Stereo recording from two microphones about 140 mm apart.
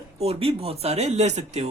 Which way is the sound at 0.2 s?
45° right (ahead or behind).